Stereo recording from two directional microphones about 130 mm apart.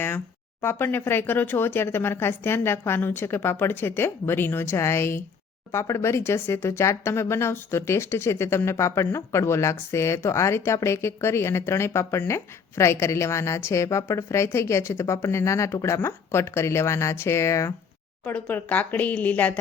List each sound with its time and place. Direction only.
0.6 s speech: 15° left (ahead or behind)